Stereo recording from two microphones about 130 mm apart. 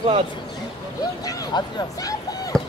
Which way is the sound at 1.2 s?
30° left (ahead or behind).